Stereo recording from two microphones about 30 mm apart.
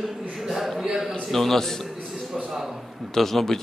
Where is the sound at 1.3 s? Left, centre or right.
Centre.